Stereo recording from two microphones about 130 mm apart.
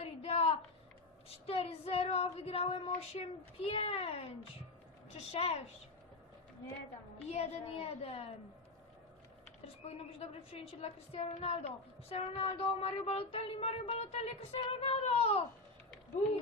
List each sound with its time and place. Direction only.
0.0 s a sound: 50° left (ahead or behind)
1.3 s a woman's voice: 50° left (ahead or behind)
7.3 s a woman's voice: 55° left (ahead or behind)
9.8 s a woman's voice: 50° left (ahead or behind)